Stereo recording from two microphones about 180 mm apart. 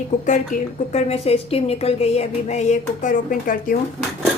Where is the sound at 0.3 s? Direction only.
40° left (ahead or behind).